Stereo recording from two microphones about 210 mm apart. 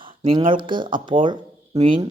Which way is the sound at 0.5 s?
20° right (ahead or behind).